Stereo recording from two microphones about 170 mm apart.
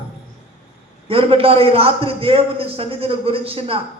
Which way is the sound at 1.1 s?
35° right (ahead or behind).